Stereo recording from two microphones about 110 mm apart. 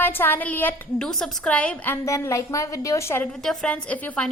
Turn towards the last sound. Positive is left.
turn(degrees=10)  # may be behind; listen again after turning